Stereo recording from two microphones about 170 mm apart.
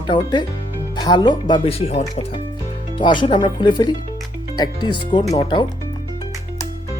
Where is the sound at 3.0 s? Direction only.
25° left (ahead or behind).